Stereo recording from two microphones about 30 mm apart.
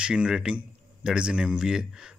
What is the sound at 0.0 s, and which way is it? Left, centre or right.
Speech, right.